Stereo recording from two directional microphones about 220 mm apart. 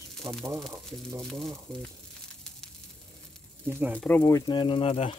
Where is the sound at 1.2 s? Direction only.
Centre (ahead or behind).